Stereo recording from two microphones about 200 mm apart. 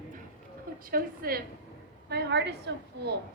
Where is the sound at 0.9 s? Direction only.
45° right (ahead or behind).